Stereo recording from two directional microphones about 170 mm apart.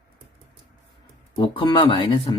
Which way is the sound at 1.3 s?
25° left (ahead or behind).